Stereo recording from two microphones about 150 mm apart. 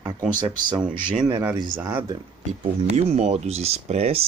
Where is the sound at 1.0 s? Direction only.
30° right (ahead or behind).